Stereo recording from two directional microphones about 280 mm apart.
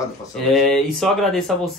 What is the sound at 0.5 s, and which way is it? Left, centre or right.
Speech, centre.